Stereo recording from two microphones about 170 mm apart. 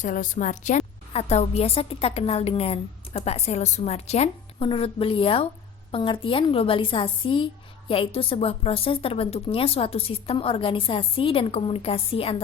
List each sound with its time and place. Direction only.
0.0 s a woman's voice: 50° left (ahead or behind); by 12.4 s 35° left (ahead or behind)